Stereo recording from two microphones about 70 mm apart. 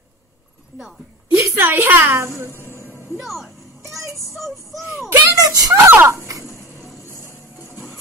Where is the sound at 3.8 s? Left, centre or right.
Right.